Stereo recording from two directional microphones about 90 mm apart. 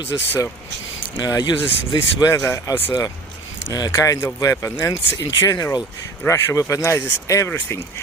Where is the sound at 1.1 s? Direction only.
50° left (ahead or behind).